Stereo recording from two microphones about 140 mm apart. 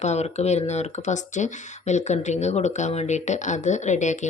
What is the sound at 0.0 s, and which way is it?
Speech, 50° left (ahead or behind).